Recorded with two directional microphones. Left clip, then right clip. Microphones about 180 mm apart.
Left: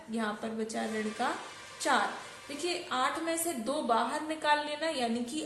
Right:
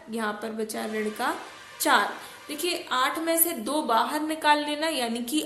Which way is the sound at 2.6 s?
30° right (ahead or behind).